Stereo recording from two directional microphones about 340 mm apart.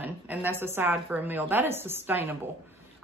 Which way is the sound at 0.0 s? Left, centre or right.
Centre.